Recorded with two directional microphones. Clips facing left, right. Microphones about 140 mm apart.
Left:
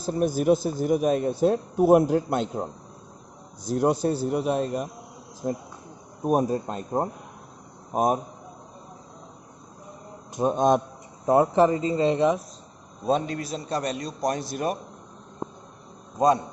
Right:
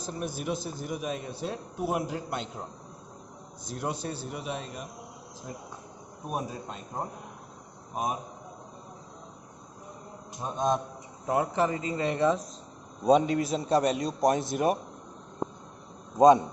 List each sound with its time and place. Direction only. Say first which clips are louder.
0.1 s speech: left 12 dB; 40° left (ahead or behind)
3.7 s speech: left 11 dB; 40° left (ahead or behind)
6.2 s speech: left 11 dB; 45° left (ahead or behind)
10.3 s a man's voice: left 7 dB; 60° left (ahead or behind)
11.3 s speech: left 8 dB; 35° left (ahead or behind); by 12.4 s 20° left (ahead or behind)
13.1 s a man's voice: right 3 dB; 15° right (ahead or behind)
13.7 s a man's voice: right 3 dB; 10° right (ahead or behind)
14.3 s a man's voice: right 2 dB; 20° right (ahead or behind)
16.1 s a man's voice: right 3 dB; 15° right (ahead or behind)